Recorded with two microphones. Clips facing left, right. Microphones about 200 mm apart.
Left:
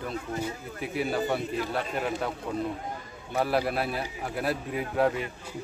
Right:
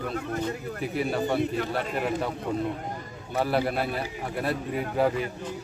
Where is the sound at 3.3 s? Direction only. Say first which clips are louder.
Right 1 dB; centre (ahead or behind).